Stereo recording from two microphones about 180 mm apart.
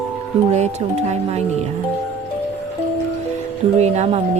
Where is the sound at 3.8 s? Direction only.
35° right (ahead or behind).